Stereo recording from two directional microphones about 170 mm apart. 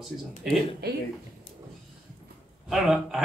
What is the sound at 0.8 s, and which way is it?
Speech, 70° right (ahead or behind).